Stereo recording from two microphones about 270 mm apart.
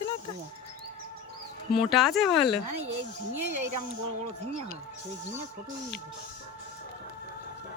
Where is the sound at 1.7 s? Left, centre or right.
Centre.